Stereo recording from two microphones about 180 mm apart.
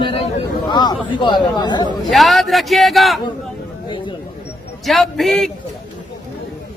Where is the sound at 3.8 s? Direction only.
30° left (ahead or behind).